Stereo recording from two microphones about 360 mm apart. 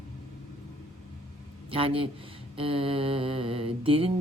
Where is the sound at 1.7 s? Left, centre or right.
Centre.